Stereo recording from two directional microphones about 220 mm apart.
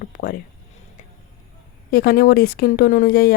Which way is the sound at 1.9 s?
45° left (ahead or behind).